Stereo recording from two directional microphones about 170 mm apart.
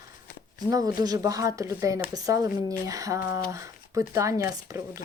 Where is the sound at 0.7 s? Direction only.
20° right (ahead or behind).